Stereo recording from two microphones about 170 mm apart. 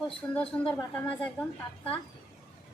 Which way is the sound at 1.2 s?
10° left (ahead or behind).